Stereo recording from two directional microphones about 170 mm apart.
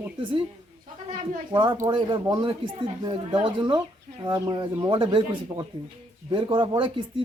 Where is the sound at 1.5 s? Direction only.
25° right (ahead or behind).